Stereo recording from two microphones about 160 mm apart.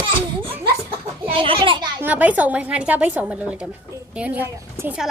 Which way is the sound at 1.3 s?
35° right (ahead or behind).